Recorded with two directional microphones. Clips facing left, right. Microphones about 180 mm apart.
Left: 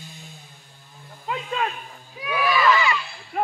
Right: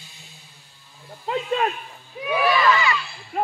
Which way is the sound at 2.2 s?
25° right (ahead or behind).